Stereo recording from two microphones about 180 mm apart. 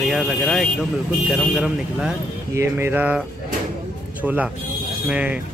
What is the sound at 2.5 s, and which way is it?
Speech, 15° right (ahead or behind).